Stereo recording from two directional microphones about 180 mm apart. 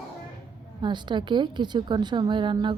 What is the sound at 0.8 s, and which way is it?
A woman's voice, 25° right (ahead or behind).